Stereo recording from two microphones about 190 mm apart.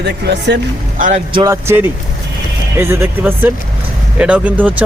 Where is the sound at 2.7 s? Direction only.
10° right (ahead or behind).